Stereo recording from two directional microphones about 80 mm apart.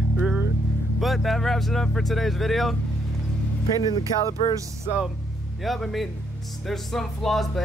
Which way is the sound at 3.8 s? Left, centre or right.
Left.